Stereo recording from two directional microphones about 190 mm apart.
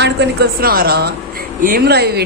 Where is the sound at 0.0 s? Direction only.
60° right (ahead or behind).